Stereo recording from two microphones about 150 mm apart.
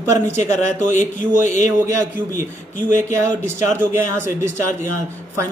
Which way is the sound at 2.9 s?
15° right (ahead or behind).